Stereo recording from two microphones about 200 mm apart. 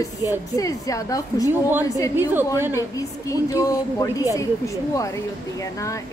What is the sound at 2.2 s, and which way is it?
Speech, 10° right (ahead or behind).